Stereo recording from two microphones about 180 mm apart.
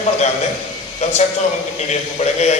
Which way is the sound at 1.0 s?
40° left (ahead or behind).